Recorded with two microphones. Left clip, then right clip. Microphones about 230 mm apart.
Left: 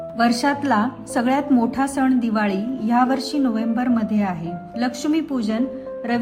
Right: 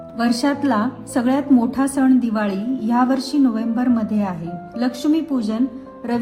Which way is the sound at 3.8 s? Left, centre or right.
Centre.